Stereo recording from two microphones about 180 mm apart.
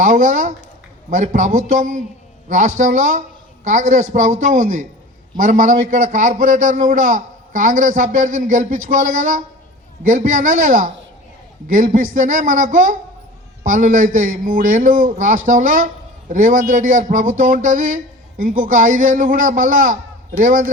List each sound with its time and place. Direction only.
0.0 s a man's voice: 45° right (ahead or behind)